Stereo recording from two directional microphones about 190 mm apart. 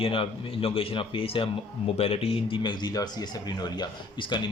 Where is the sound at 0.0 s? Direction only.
30° left (ahead or behind).